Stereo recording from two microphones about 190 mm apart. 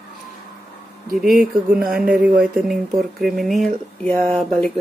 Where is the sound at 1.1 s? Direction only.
5° right (ahead or behind).